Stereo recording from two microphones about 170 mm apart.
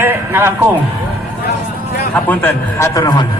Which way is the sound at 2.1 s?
10° left (ahead or behind).